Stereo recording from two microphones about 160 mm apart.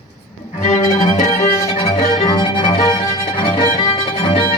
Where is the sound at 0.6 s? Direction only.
50° left (ahead or behind).